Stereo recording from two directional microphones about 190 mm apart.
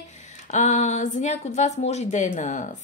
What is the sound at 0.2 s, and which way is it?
Speech, 40° left (ahead or behind).